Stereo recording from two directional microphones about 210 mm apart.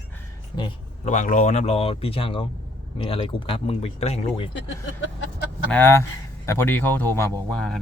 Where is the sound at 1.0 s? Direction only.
35° left (ahead or behind).